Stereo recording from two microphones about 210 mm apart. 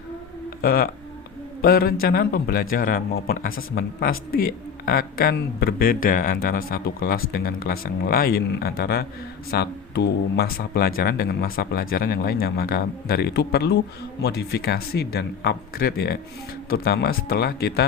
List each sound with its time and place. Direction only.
0.6 s speech: 45° left (ahead or behind)